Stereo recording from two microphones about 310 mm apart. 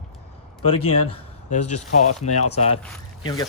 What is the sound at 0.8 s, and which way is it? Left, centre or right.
Speech, left.